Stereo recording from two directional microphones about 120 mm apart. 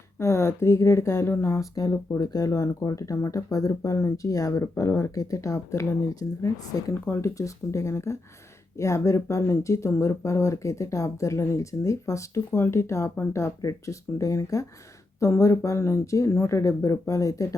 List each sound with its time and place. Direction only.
0.2 s speech: 20° left (ahead or behind)